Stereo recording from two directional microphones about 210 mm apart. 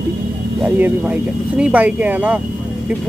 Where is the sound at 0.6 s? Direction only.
5° right (ahead or behind).